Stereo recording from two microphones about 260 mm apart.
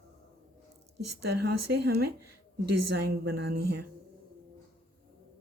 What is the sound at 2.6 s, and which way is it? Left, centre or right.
Speech, right.